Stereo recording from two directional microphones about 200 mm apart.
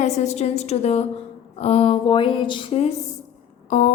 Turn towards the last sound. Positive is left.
turn(degrees=40)  # may be behind; listen again after turning